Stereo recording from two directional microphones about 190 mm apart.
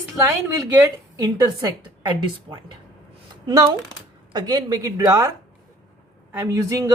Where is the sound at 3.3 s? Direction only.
20° right (ahead or behind).